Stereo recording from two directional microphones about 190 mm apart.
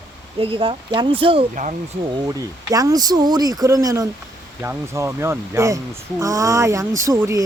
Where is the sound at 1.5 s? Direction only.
40° right (ahead or behind).